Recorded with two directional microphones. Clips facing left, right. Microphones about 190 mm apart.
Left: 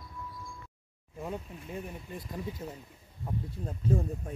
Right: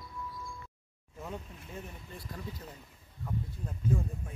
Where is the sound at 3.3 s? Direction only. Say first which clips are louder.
Left 2 dB; 35° left (ahead or behind).